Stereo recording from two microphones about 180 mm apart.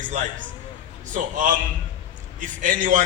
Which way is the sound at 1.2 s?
45° right (ahead or behind).